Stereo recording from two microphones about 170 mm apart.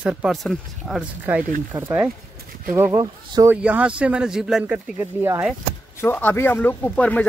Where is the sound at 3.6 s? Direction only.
5° right (ahead or behind).